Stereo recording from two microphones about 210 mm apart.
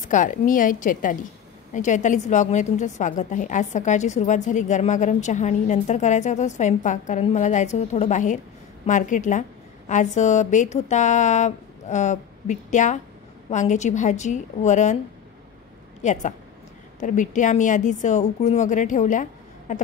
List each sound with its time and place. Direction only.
0.0 s a woman's voice: 35° left (ahead or behind)
16.0 s a woman's voice: 35° left (ahead or behind)
19.7 s a sound: 35° left (ahead or behind)